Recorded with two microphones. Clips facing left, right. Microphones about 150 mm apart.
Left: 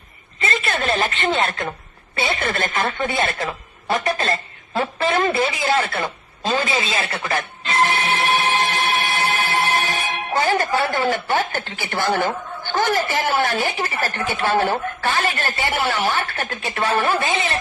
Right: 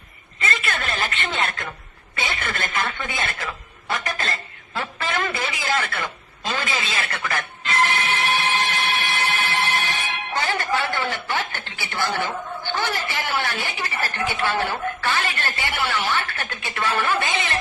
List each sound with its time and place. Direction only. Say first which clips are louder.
0.4 s a sound: left 5 dB; 30° left (ahead or behind)
1.2 s a woman's voice: left 6 dB; 40° left (ahead or behind)
3.9 s speech: left 7 dB; 25° left (ahead or behind)
4.7 s a woman's voice: left 7 dB; 40° left (ahead or behind)
7.9 s a sound: left 3 dB; 40° left (ahead or behind)
12.7 s a woman's voice: left 7 dB; 45° left (ahead or behind)